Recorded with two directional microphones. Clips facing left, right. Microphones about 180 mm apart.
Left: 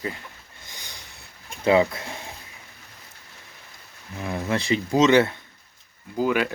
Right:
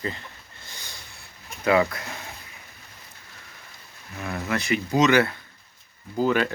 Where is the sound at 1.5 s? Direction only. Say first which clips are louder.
Left 2 dB; 25° left (ahead or behind).